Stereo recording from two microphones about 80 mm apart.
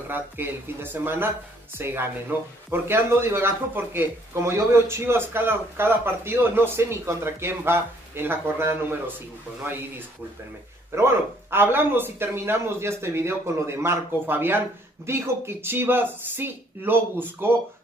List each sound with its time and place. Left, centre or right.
0.1 s a man's voice: right
11.0 s a man's voice: right